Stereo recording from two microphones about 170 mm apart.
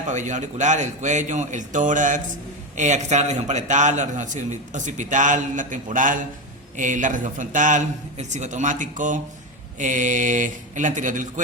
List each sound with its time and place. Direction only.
0.1 s a man's voice: 45° right (ahead or behind)